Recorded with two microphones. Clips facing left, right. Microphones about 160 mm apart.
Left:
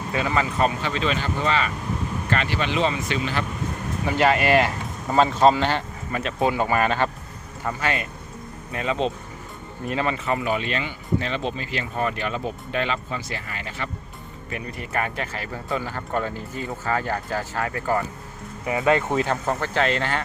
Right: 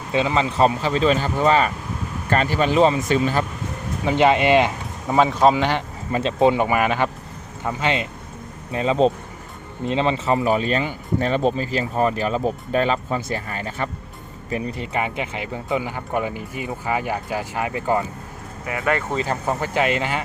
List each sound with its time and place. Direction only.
0.1 s speech: 20° right (ahead or behind); by 3.4 s 40° right (ahead or behind)
4.0 s speech: 20° right (ahead or behind)
5.1 s speech: 5° right (ahead or behind)
6.1 s speech: 25° right (ahead or behind)
9.8 s speech: 25° right (ahead or behind); by 13.9 s 45° right (ahead or behind)
14.5 s speech: 25° right (ahead or behind)
18.7 s speech: 25° left (ahead or behind)
19.1 s speech: 5° right (ahead or behind)